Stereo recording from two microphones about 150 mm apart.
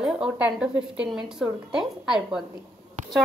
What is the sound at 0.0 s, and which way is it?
A woman's voice, 5° right (ahead or behind).